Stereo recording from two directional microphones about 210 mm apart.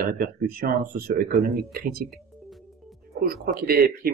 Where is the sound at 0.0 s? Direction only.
45° right (ahead or behind).